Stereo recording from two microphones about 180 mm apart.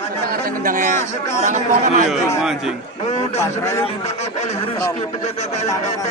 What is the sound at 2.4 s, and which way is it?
Speech, centre (ahead or behind).